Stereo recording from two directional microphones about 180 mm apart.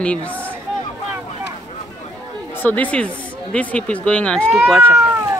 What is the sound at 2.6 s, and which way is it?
Speech, 10° left (ahead or behind).